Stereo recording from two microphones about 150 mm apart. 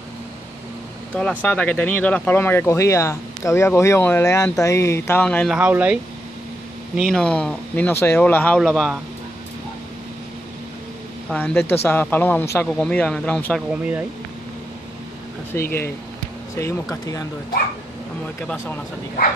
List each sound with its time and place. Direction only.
1.1 s speech: 10° left (ahead or behind)
5.5 s speech: 10° right (ahead or behind)
7.0 s a man's voice: 5° left (ahead or behind)
11.3 s speech: 10° left (ahead or behind)
13.7 s speech: 10° right (ahead or behind)
15.5 s speech: 10° left (ahead or behind)